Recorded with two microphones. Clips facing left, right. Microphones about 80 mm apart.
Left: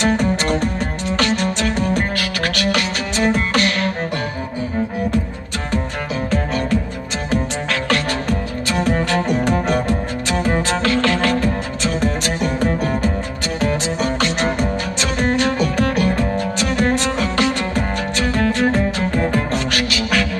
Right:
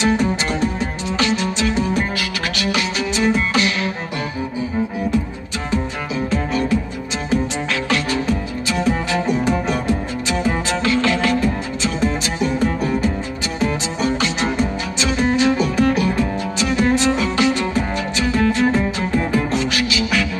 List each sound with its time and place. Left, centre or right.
0.0 s music: left
6.3 s music: left
7.9 s music: left